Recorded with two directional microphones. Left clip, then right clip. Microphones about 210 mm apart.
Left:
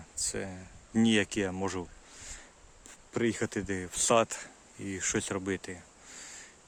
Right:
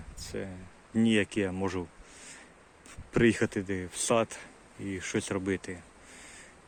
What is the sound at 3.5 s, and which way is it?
Speech, 15° left (ahead or behind).